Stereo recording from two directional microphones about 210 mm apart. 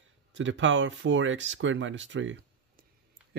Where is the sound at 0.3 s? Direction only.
60° right (ahead or behind).